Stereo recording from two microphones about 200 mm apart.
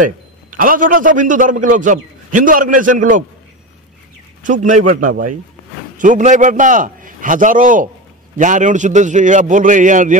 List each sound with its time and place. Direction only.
0.0 s a man's voice: 45° right (ahead or behind)
4.4 s a man's voice: 40° right (ahead or behind)